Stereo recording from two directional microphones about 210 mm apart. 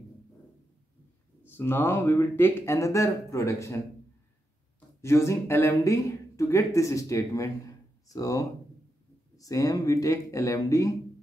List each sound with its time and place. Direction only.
1.5 s speech: 10° left (ahead or behind)
4.7 s speech: 15° left (ahead or behind)